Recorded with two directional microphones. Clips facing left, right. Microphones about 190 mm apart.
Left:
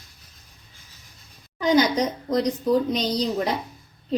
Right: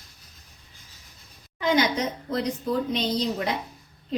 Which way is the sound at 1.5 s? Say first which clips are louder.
Left 4 dB; 35° left (ahead or behind).